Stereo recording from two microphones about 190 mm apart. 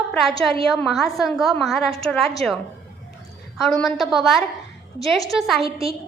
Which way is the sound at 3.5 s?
Centre (ahead or behind).